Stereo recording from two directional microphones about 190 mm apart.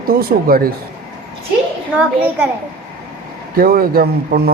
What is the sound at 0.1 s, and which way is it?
Speech, 50° right (ahead or behind).